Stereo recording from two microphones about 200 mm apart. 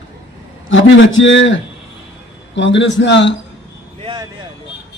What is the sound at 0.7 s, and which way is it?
A man's voice, 70° left (ahead or behind).